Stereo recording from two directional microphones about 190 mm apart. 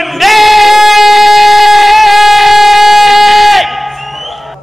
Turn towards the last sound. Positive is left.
turn(degrees=0)  # may be behind; listen again after turning